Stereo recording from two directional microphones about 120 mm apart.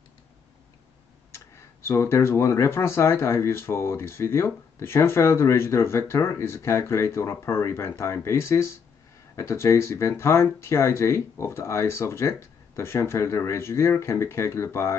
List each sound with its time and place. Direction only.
1.3 s speech: 20° left (ahead or behind)